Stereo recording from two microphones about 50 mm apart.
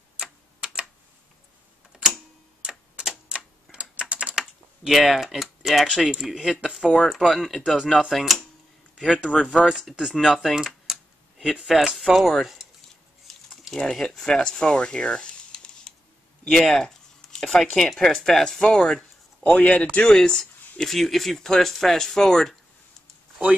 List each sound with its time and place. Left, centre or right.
0.2 s typewriter: centre
3.0 s typewriter: centre
3.7 s typing: centre
4.1 s typing: right
4.8 s speech: centre
9.4 s speech: centre
9.7 s speech: centre
13.3 s a sound: centre
17.9 s speech: centre
19.4 s speech: left
20.2 s speech: centre